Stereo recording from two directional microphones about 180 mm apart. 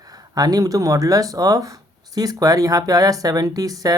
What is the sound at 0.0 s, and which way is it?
Speech, 20° right (ahead or behind).